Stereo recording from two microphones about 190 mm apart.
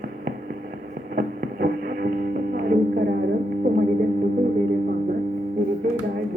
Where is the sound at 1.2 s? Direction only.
55° right (ahead or behind).